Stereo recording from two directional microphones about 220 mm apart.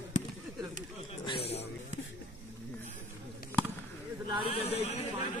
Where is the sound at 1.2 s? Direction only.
25° left (ahead or behind).